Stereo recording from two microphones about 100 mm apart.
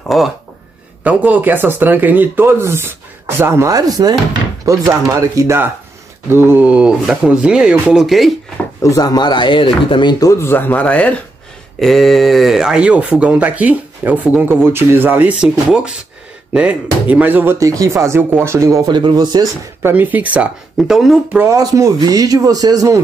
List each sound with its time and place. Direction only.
0.1 s speech: centre (ahead or behind)
1.0 s speech: 15° right (ahead or behind)
3.7 s speech: 40° right (ahead or behind); by 8.3 s centre (ahead or behind)
8.8 s speech: 40° left (ahead or behind); by 10.1 s 55° left (ahead or behind)
10.2 s speech: 25° left (ahead or behind)
11.8 s speech: centre (ahead or behind); by 15.3 s 20° right (ahead or behind)
16.5 s speech: 15° right (ahead or behind)
17.6 s speech: 35° right (ahead or behind)
18.9 s speech: 50° right (ahead or behind)
19.8 s speech: 20° right (ahead or behind)
20.7 s speech: 5° right (ahead or behind)
21.5 s speech: 35° right (ahead or behind)